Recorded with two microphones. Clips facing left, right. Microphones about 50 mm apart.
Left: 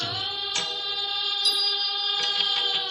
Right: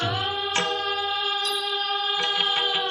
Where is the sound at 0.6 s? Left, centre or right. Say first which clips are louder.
Right 6 dB; right.